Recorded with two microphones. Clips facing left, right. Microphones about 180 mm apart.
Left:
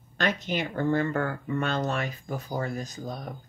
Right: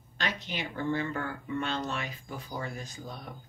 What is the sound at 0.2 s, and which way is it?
Speech, 50° left (ahead or behind).